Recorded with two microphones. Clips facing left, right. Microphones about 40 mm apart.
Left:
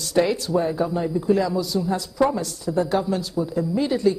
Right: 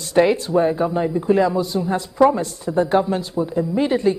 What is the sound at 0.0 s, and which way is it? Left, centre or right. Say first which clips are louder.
A woman's voice: right 4 dB; right.